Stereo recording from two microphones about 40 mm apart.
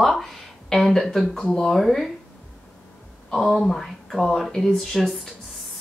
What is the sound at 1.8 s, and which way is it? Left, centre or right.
Speech, centre.